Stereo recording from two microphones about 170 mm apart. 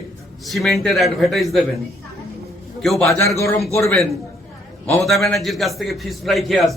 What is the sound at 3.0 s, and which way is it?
Speech, 15° left (ahead or behind).